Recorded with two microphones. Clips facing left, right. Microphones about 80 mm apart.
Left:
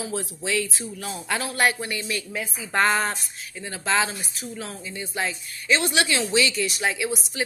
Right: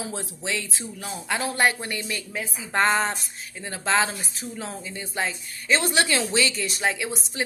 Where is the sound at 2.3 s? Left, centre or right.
Centre.